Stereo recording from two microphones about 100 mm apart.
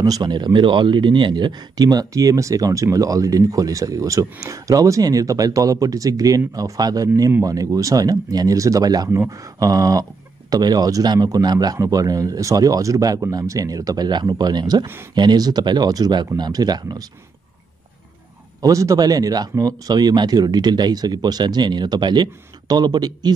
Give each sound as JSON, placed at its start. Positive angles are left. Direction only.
{"t": 0.0, "sound": "a man's voice", "side_deg": -40}
{"t": 18.6, "sound": "speech", "side_deg": -35}